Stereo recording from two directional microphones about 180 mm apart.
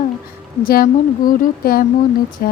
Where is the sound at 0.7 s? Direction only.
55° left (ahead or behind).